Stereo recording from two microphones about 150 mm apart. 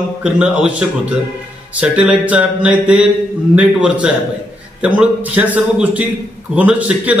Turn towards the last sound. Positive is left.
turn(degrees=-10)  # may be behind; listen again after turning